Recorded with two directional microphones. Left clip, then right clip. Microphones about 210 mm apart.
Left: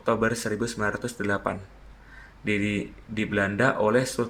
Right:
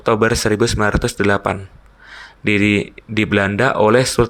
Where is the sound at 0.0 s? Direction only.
40° right (ahead or behind).